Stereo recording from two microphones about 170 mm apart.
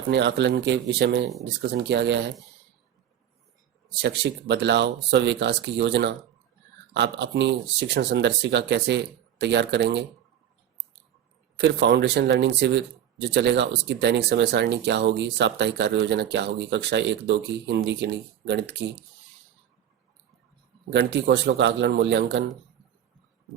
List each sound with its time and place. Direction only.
0.1 s speech: 90° right
4.0 s speech: 90° right
11.6 s speech: 85° right
20.9 s speech: 90° right